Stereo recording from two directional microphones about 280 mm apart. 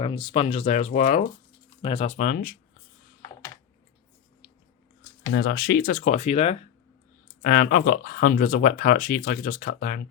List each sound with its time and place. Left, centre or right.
0.0 s speech: centre
5.3 s speech: left
7.4 s speech: left